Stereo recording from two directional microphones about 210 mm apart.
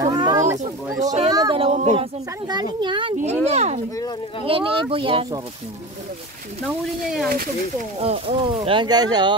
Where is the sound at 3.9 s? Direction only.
20° left (ahead or behind).